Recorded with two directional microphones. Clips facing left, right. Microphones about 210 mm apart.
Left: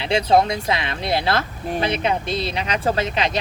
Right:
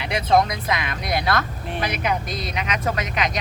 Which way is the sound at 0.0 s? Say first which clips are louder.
Left 2 dB; 30° left (ahead or behind).